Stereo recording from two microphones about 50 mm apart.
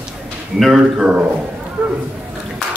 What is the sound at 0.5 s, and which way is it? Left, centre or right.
Speech, centre.